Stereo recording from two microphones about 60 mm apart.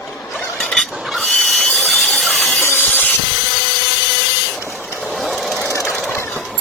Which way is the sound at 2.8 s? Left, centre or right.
Left.